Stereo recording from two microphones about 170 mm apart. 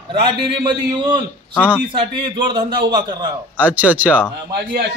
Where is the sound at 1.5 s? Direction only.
10° left (ahead or behind).